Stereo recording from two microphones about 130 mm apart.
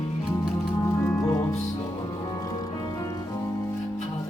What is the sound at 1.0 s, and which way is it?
Music, 20° left (ahead or behind).